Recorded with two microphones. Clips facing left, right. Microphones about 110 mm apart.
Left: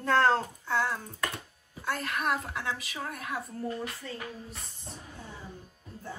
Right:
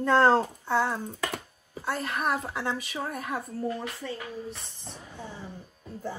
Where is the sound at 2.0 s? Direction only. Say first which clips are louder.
Right 2 dB; 30° right (ahead or behind).